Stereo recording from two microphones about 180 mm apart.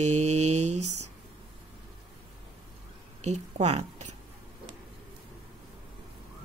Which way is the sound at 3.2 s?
40° right (ahead or behind).